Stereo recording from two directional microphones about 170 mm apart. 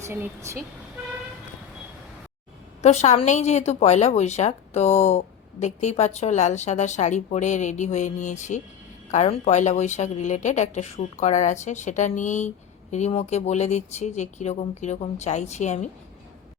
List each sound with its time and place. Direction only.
0.0 s speech: 15° right (ahead or behind)
2.8 s a woman's voice: 40° left (ahead or behind)